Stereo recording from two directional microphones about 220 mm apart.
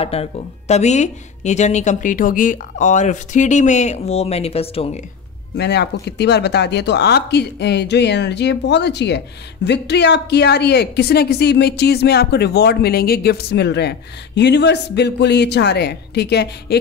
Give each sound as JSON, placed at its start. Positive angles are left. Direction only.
{"t": 0.0, "sound": "speech", "side_deg": 25}
{"t": 5.6, "sound": "speech", "side_deg": 50}